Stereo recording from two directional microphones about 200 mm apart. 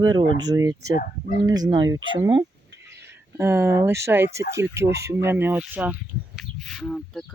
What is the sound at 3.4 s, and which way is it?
Speech, 10° right (ahead or behind).